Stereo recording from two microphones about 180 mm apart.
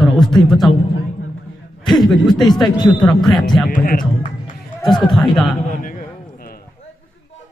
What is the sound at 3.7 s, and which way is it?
Speech, 50° left (ahead or behind).